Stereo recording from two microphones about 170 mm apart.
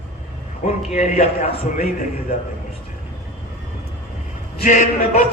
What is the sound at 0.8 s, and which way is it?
A man's voice, 45° left (ahead or behind).